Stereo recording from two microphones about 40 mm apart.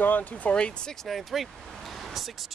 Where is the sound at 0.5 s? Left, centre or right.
Left.